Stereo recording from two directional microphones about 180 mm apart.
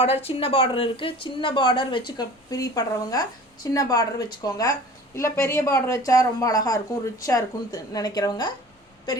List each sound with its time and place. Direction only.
0.0 s a woman's voice: 35° left (ahead or behind)